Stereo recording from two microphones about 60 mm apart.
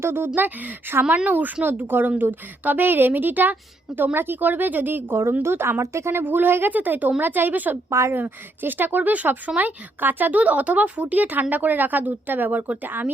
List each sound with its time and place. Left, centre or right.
0.0 s a woman's voice: right
5.4 s speech: right
6.2 s a woman's voice: right
7.9 s a woman's voice: right
8.1 s a woman's voice: right